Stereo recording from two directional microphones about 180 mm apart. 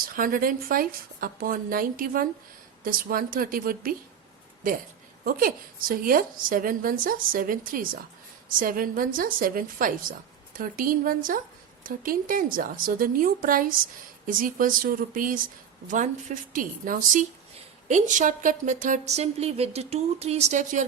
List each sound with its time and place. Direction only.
0.2 s a woman's voice: 50° right (ahead or behind)
5.2 s a woman's voice: 55° right (ahead or behind)